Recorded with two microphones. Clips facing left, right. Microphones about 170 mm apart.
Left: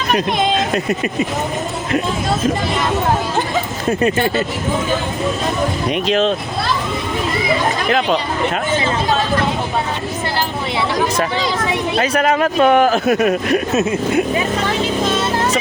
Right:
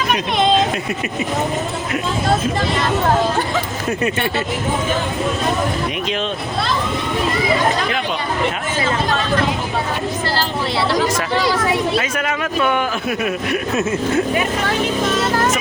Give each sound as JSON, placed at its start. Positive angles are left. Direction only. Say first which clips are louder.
{"t": 11.9, "sound": "speech", "louder": "left 5 dB", "side_deg": 40}
{"t": 13.7, "sound": "speech", "louder": "left 2 dB", "side_deg": 15}